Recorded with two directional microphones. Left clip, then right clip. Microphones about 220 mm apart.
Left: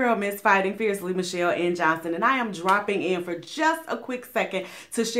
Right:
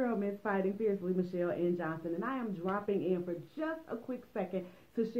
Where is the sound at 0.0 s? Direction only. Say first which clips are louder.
Left 13 dB; 15° left (ahead or behind).